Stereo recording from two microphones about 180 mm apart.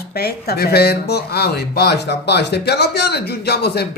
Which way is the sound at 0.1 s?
60° left (ahead or behind).